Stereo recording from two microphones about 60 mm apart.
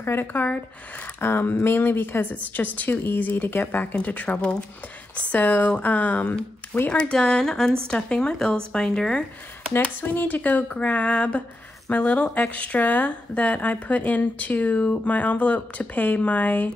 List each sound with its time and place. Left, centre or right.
0.0 s speech: left; by 9.2 s centre
9.7 s speech: left